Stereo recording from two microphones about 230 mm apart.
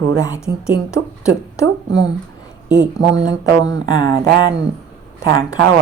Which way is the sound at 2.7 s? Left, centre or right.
Right.